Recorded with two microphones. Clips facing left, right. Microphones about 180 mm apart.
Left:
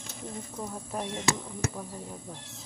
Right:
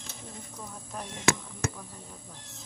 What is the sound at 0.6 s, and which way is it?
Speech, 25° left (ahead or behind).